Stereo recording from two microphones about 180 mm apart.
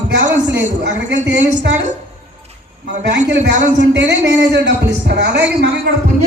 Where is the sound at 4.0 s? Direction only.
75° right (ahead or behind).